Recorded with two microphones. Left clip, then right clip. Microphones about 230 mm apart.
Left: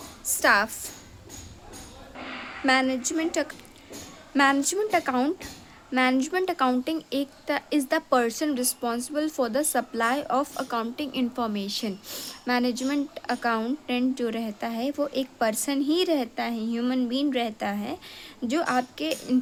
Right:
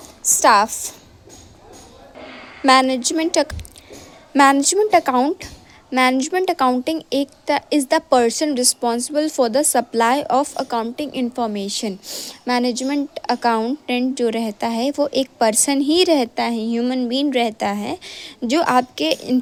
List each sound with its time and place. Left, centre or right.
0.3 s speech: right
2.6 s speech: right